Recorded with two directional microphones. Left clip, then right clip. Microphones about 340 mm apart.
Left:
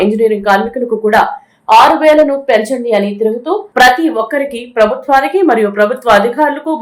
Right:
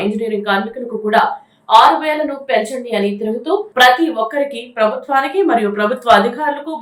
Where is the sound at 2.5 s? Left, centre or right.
Centre.